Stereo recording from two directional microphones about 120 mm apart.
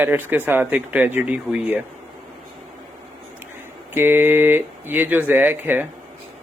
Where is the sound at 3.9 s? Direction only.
20° right (ahead or behind).